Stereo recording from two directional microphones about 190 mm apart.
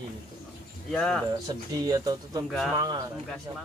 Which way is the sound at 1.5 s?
20° right (ahead or behind).